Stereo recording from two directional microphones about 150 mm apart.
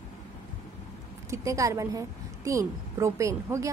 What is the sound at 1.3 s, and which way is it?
A woman's voice, 20° right (ahead or behind).